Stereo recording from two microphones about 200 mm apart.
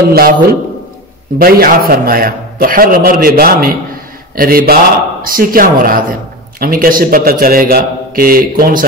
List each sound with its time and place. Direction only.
0.1 s a man's voice: 50° right (ahead or behind)